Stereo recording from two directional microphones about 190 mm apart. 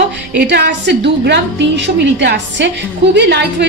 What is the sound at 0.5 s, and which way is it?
A woman's voice, 65° right (ahead or behind).